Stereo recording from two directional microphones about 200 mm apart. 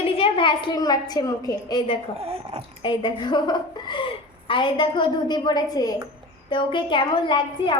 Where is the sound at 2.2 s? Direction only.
30° right (ahead or behind).